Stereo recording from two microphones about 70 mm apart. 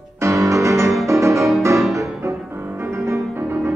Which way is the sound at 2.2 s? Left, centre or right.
Right.